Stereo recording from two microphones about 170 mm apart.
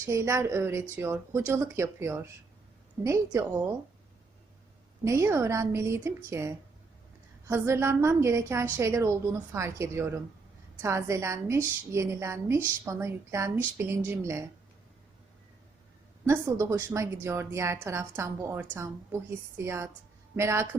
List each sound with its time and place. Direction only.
0.0 s a woman's voice: 15° right (ahead or behind)
5.0 s a woman's voice: 15° right (ahead or behind)
16.2 s a woman's voice: 15° right (ahead or behind)